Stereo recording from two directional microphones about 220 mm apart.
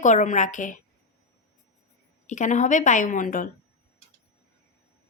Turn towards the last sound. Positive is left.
turn(degrees=40)  # may be behind; listen again after turning